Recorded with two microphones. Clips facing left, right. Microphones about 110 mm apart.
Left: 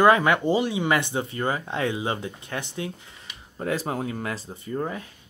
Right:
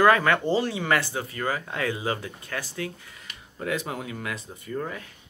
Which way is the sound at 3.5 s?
35° left (ahead or behind).